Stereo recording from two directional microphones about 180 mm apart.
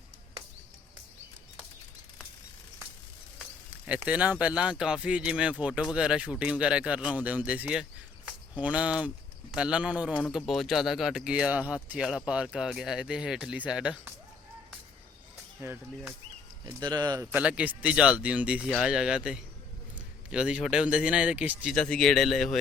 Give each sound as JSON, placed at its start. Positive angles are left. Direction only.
{"t": 3.8, "sound": "speech", "side_deg": -10}
{"t": 16.6, "sound": "speech", "side_deg": -25}
{"t": 17.3, "sound": "speech", "side_deg": -5}
{"t": 21.8, "sound": "speech", "side_deg": 5}